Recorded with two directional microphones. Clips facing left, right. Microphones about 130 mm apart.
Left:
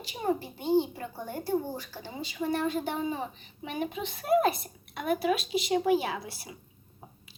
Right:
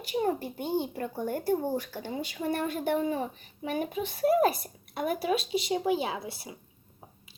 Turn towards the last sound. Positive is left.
turn(degrees=-25)  # may be behind; listen again after turning